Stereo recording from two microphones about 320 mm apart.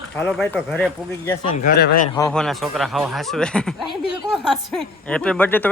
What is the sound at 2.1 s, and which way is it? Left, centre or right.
Speech, centre.